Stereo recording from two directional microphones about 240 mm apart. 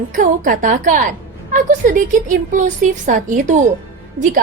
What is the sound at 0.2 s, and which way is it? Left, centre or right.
A woman's voice, right.